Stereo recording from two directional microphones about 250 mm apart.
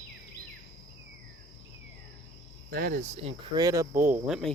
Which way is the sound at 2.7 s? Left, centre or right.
Right.